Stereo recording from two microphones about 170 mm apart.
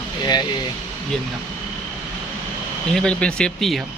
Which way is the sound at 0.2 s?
25° left (ahead or behind).